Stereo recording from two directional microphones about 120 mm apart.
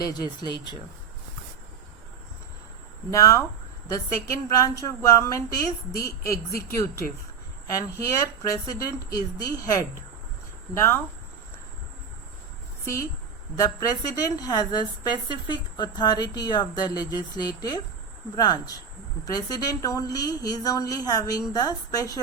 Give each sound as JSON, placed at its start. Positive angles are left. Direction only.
{"t": 0.0, "sound": "a woman's voice", "side_deg": 35}
{"t": 3.1, "sound": "a woman's voice", "side_deg": 25}
{"t": 12.8, "sound": "a woman's voice", "side_deg": 25}